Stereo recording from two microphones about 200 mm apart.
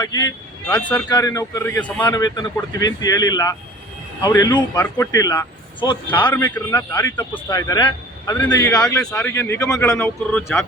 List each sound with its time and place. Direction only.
0.0 s speech: 20° left (ahead or behind)
0.7 s a man's voice: 5° left (ahead or behind)
6.3 s a man's voice: 10° left (ahead or behind)
10.3 s speech: centre (ahead or behind)